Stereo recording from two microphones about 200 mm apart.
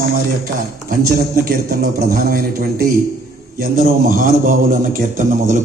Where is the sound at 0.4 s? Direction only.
45° right (ahead or behind).